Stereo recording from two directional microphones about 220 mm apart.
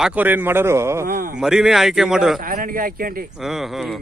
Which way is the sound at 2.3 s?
40° right (ahead or behind).